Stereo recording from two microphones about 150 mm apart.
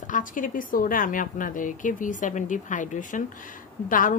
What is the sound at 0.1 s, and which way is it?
A woman's voice, 60° left (ahead or behind).